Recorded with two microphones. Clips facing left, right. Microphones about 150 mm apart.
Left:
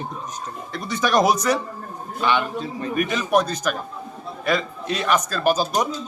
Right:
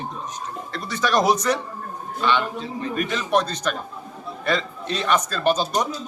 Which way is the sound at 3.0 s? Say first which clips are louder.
Left 2 dB; 10° left (ahead or behind).